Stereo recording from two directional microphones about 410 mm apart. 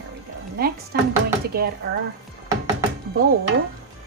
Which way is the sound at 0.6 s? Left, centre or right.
Right.